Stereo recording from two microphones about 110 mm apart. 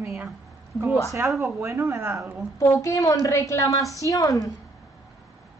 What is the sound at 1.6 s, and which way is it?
Speech, 25° right (ahead or behind).